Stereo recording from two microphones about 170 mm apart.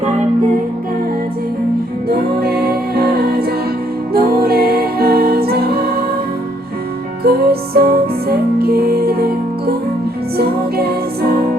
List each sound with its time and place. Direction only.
2.0 s music: 65° right (ahead or behind)
7.3 s music: 65° right (ahead or behind)